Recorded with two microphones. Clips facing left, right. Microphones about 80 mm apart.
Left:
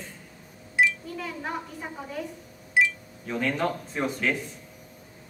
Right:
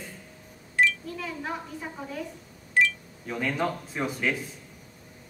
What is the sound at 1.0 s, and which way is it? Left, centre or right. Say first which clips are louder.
A woman's voice: even; centre.